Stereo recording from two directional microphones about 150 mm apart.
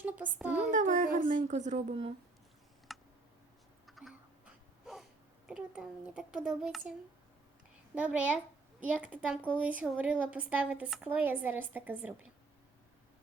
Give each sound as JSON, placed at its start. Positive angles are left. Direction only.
{"t": 0.0, "sound": "speech", "side_deg": -10}
{"t": 0.5, "sound": "child singing", "side_deg": -60}
{"t": 1.3, "sound": "a woman's voice", "side_deg": -55}
{"t": 2.9, "sound": "a sound", "side_deg": 0}
{"t": 5.5, "sound": "a child's voice", "side_deg": -5}
{"t": 7.9, "sound": "speech", "side_deg": -10}